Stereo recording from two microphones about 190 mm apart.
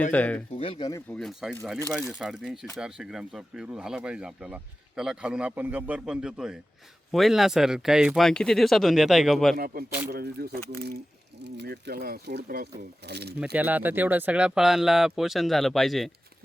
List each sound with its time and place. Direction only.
0.1 s speech: 5° left (ahead or behind)
0.5 s speech: 30° left (ahead or behind)
1.1 s speech: centre (ahead or behind)
9.6 s speech: 50° right (ahead or behind)
13.4 s speech: 5° right (ahead or behind)